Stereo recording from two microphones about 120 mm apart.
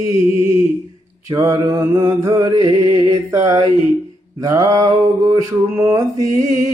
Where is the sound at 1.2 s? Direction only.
30° right (ahead or behind).